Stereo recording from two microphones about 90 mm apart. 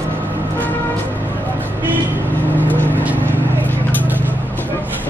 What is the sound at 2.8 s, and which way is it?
Vehicle, 20° right (ahead or behind).